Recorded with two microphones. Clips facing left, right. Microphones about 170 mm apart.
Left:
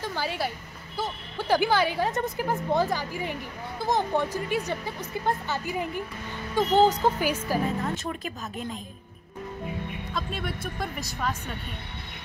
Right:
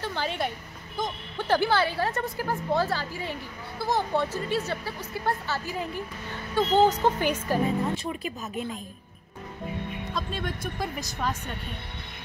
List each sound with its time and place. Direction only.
0.0 s a woman's voice: 10° left (ahead or behind)
10.1 s speech: centre (ahead or behind)